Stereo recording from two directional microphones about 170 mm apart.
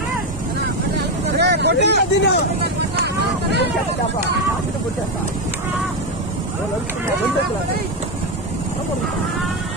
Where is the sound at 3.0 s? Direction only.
80° right.